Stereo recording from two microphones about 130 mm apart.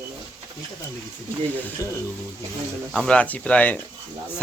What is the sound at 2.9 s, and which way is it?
Speech, 5° left (ahead or behind).